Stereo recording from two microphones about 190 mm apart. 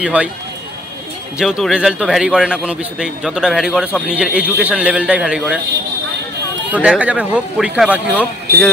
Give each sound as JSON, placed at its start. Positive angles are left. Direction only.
{"t": 0.0, "sound": "a man's voice", "side_deg": -5}
{"t": 1.4, "sound": "a man's voice", "side_deg": 0}
{"t": 6.7, "sound": "a man's voice", "side_deg": -5}
{"t": 8.5, "sound": "speech", "side_deg": -55}